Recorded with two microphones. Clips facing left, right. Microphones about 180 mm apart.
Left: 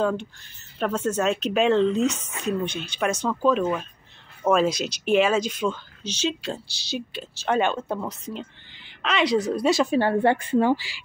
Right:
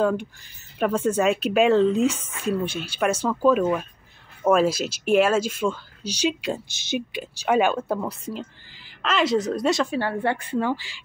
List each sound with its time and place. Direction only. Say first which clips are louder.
0.7 s speech: right 3 dB; 10° right (ahead or behind)
9.8 s speech: left 4 dB; 20° left (ahead or behind)